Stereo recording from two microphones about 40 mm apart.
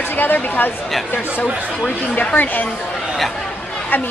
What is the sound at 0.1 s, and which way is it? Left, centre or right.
A woman's voice, left.